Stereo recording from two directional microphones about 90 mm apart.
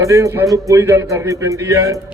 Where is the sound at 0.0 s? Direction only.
35° right (ahead or behind).